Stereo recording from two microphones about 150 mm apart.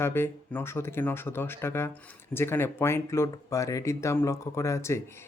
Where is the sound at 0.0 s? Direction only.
15° left (ahead or behind).